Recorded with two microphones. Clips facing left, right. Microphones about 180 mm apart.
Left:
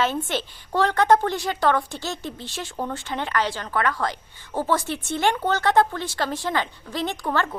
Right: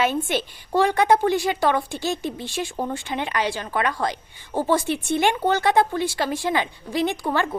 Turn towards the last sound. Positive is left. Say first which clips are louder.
# right 2 dB
turn(degrees=-10)  # may be behind; listen again after turning